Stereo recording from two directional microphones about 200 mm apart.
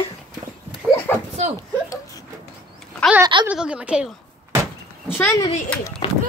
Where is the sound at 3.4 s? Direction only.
5° right (ahead or behind).